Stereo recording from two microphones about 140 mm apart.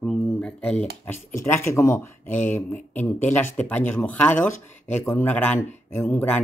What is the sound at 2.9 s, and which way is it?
Speech, 10° left (ahead or behind).